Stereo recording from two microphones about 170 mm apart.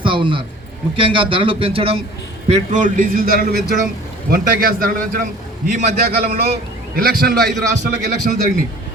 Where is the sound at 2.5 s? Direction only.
50° right (ahead or behind).